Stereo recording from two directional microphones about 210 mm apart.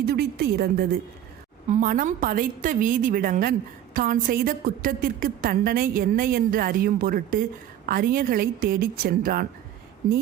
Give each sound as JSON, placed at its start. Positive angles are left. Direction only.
{"t": 0.0, "sound": "a woman's voice", "side_deg": -50}